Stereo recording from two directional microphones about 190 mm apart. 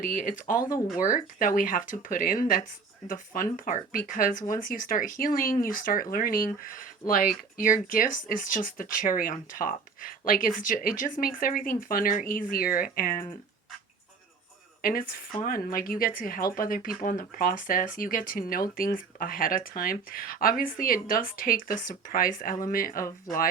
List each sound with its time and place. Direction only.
0.0 s speech: 45° left (ahead or behind)
14.8 s a woman's voice: 50° left (ahead or behind)
23.0 s speech: 15° left (ahead or behind)